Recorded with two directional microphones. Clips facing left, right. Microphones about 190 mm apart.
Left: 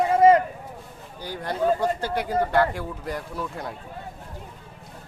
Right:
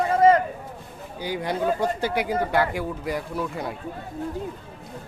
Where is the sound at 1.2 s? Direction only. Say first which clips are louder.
Right 1 dB; 15° right (ahead or behind).